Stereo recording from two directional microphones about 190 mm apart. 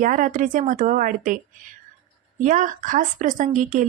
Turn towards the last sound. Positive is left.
turn(degrees=-40)  # may be behind; listen again after turning